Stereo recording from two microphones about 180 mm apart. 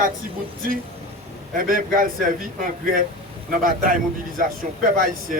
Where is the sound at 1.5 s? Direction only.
50° right (ahead or behind).